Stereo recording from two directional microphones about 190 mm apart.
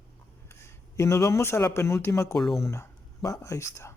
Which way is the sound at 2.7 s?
15° left (ahead or behind).